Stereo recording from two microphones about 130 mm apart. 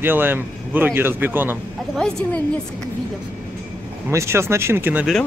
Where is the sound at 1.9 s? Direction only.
5° left (ahead or behind).